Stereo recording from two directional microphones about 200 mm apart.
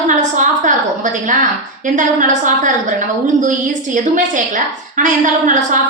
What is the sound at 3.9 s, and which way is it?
A woman's voice, 40° right (ahead or behind).